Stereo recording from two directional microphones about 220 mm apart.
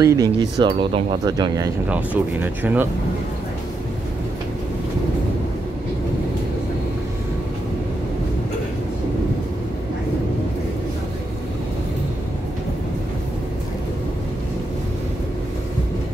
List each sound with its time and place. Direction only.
0.0 s speech: 15° right (ahead or behind)